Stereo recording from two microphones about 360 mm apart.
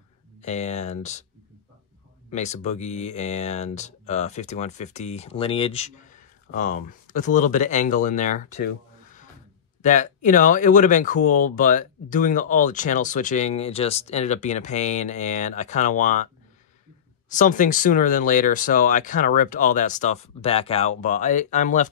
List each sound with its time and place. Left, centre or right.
0.4 s speech: centre
2.3 s speech: centre
17.3 s speech: left